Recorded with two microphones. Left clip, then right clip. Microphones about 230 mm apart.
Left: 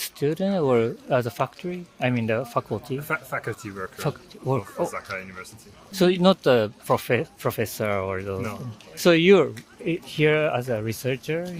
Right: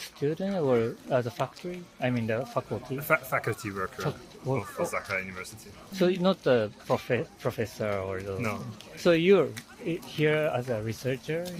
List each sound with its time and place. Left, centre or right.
0.0 s speech: left
3.0 s speech: centre
3.9 s speech: left
4.9 s speech: centre
5.9 s speech: left